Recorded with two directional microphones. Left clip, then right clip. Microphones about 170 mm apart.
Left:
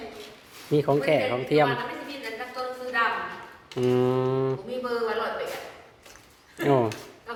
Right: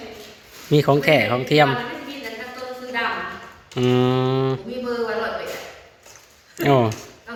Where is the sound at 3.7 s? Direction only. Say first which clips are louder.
Right 4 dB; centre (ahead or behind).